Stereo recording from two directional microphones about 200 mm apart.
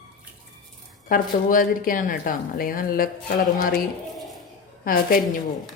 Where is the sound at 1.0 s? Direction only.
40° left (ahead or behind).